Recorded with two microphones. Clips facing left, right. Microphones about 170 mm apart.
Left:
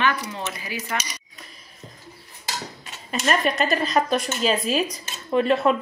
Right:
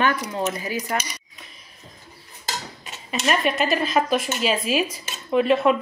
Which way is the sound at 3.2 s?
5° right (ahead or behind).